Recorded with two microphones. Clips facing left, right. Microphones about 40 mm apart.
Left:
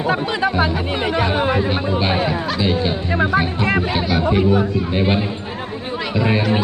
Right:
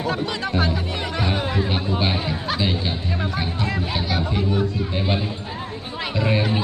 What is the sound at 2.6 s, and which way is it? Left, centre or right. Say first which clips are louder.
Speech: left 7 dB; centre.